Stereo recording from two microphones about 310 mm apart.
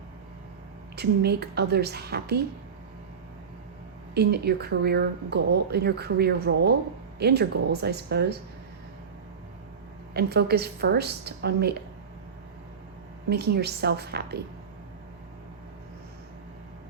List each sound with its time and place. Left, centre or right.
0.9 s speech: right
4.1 s speech: right
10.2 s speech: right
13.3 s speech: right